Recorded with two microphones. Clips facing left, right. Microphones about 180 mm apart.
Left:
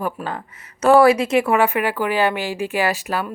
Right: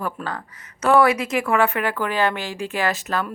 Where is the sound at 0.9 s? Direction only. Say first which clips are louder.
Left 4 dB; 30° left (ahead or behind).